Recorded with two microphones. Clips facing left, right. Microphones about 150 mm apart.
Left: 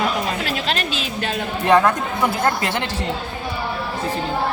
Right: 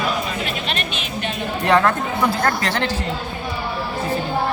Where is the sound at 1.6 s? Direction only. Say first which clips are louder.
Left 1 dB; 20° left (ahead or behind).